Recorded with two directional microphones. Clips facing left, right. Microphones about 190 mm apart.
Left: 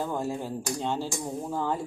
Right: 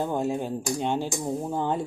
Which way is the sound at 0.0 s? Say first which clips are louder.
Right 4 dB; 20° right (ahead or behind).